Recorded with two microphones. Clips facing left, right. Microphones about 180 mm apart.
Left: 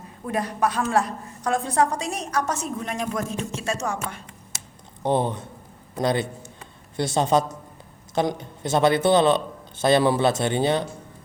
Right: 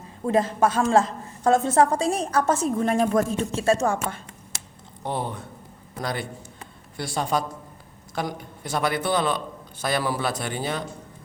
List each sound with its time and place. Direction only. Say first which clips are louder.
0.3 s a woman's voice: right 4 dB; 25° right (ahead or behind)
5.0 s a man's voice: left 6 dB; 20° left (ahead or behind)